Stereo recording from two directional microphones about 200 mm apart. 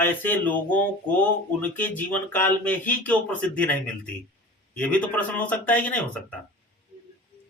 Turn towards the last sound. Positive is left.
turn(degrees=5)  # may be behind; listen again after turning